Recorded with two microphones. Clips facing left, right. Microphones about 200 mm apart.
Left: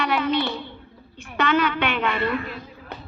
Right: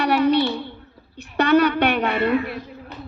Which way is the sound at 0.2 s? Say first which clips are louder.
Right 5 dB; 60° left (ahead or behind).